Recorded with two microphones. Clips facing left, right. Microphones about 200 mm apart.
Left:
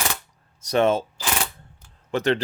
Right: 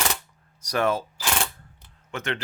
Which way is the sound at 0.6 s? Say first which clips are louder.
Left 5 dB; 25° left (ahead or behind).